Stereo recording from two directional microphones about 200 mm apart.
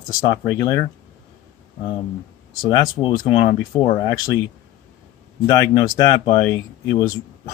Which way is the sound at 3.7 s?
20° left (ahead or behind).